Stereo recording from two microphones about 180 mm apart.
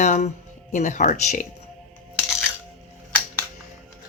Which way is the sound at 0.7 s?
40° left (ahead or behind).